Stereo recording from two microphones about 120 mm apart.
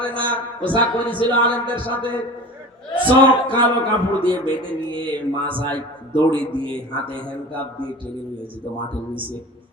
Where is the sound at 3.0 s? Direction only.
45° right (ahead or behind).